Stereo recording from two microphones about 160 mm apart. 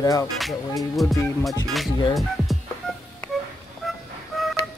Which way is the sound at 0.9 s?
Centre (ahead or behind).